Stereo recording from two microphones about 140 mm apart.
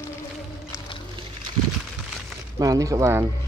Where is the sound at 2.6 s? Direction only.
25° right (ahead or behind).